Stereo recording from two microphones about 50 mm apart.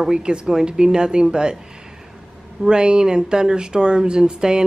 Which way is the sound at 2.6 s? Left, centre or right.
Centre.